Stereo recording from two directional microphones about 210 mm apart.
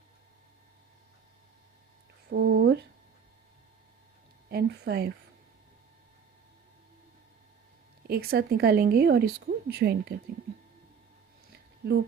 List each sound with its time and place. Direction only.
2.3 s a sound: 50° right (ahead or behind)
4.4 s a woman's voice: 50° right (ahead or behind)
8.0 s a woman's voice: 45° right (ahead or behind)